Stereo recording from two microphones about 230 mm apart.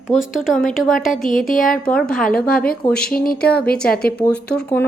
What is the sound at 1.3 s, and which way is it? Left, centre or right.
Speech, left.